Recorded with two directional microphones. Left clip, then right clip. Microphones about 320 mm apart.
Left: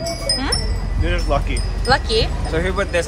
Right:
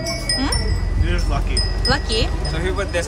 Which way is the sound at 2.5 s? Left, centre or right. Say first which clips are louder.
Left 4 dB; centre.